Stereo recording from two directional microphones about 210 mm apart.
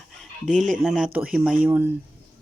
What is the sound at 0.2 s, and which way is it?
Speech, centre (ahead or behind).